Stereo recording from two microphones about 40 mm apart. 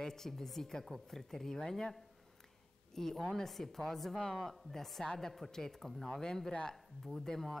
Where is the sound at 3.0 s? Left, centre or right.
Centre.